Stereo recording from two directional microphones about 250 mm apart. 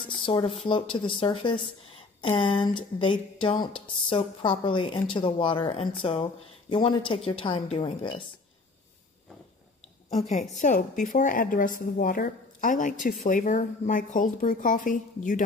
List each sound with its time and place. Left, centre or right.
0.0 s a woman's voice: centre
7.2 s a woman's voice: left
10.0 s a woman's voice: left